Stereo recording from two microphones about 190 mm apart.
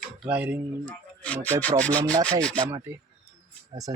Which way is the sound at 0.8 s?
5° left (ahead or behind).